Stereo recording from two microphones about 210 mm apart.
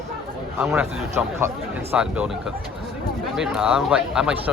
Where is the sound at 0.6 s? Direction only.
10° right (ahead or behind).